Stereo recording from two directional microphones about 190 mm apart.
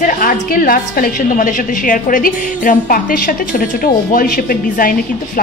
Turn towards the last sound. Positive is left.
turn(degrees=45)  # may be behind; listen again after turning